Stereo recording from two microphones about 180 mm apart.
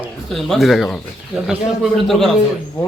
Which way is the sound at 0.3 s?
Centre (ahead or behind).